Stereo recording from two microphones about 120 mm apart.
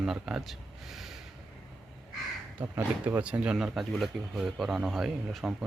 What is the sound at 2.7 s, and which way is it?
Speech, 15° right (ahead or behind).